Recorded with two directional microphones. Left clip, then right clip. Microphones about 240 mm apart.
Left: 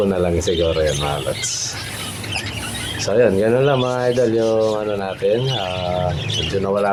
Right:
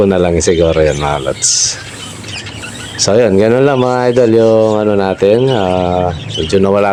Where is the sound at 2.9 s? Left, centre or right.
Right.